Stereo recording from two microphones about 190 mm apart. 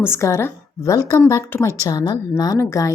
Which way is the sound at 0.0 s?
15° left (ahead or behind).